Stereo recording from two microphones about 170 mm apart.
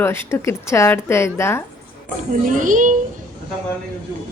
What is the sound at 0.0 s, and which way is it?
A woman's voice, 15° left (ahead or behind).